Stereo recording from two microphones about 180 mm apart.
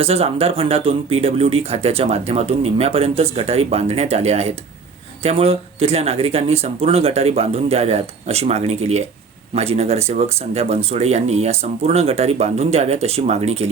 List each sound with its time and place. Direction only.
0.0 s speech: 35° right (ahead or behind)